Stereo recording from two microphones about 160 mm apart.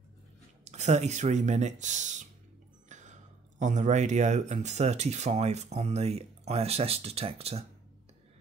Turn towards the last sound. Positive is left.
turn(degrees=-40)  # may be behind; listen again after turning